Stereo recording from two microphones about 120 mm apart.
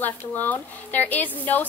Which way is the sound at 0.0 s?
15° left (ahead or behind).